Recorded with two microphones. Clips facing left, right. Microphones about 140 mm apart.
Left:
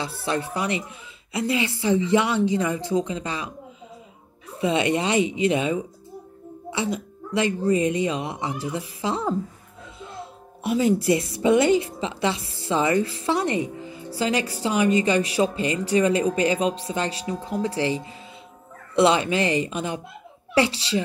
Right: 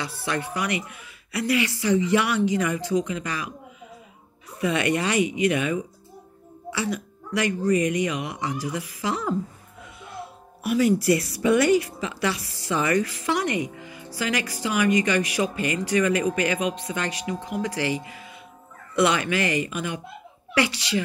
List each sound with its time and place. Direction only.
0.0 s speech: 30° left (ahead or behind)
4.6 s speech: 25° left (ahead or behind)